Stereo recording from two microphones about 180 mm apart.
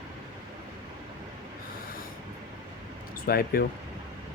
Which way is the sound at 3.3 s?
55° left (ahead or behind).